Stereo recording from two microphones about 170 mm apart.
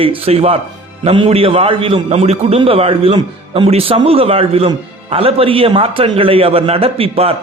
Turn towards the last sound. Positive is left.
turn(degrees=-35)  # may be behind; listen again after turning